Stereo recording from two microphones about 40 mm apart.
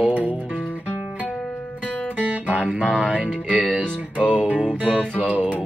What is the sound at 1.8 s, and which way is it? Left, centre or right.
Music, left.